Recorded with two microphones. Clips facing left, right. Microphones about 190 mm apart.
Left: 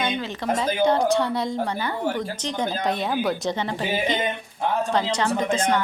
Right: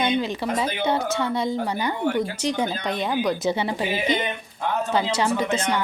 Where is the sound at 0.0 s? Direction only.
15° right (ahead or behind).